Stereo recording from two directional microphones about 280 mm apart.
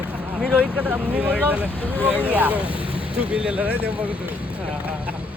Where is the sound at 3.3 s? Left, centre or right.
Centre.